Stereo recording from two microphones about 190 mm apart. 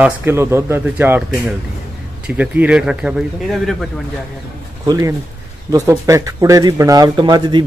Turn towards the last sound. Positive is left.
turn(degrees=-25)  # may be behind; listen again after turning